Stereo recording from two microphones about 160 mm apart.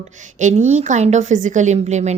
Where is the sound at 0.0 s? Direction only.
50° right (ahead or behind).